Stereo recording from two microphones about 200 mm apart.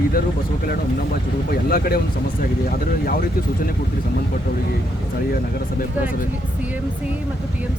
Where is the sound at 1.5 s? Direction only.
50° left (ahead or behind).